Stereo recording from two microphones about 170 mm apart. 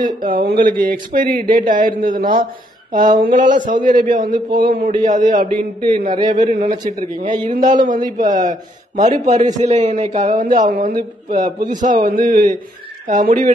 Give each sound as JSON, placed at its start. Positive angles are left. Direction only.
{"t": 0.0, "sound": "a man's voice", "side_deg": -55}